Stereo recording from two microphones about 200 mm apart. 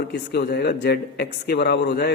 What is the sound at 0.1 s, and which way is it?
Speech, 55° left (ahead or behind).